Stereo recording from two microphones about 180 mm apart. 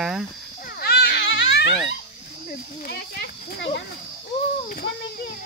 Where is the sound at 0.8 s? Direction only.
60° left (ahead or behind); by 1.6 s 90° left.